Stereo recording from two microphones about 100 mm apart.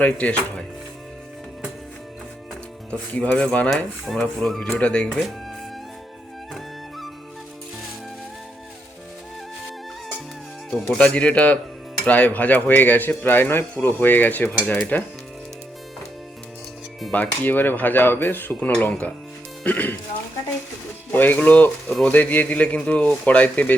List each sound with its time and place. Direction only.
0.0 s cutlery: 15° left (ahead or behind)
3.2 s cutlery: 10° left (ahead or behind)
4.2 s speech: 5° left (ahead or behind)
4.7 s cutlery: 10° left (ahead or behind)
10.8 s cutlery: 15° left (ahead or behind)
17.1 s speech: 15° left (ahead or behind)
19.6 s cutlery: 15° left (ahead or behind)
21.1 s speech: 20° left (ahead or behind)
22.1 s cutlery: 15° left (ahead or behind)